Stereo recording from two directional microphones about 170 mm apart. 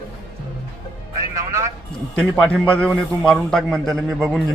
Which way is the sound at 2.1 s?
5° left (ahead or behind).